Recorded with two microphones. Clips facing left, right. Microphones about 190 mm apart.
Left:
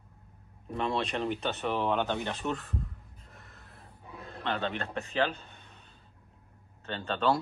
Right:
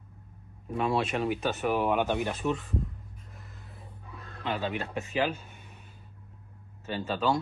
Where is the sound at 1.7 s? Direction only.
15° right (ahead or behind).